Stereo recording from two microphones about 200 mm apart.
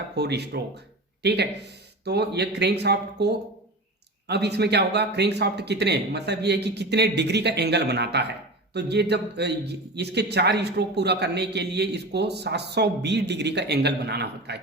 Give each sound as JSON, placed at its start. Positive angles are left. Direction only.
{"t": 0.2, "sound": "a man's voice", "side_deg": -55}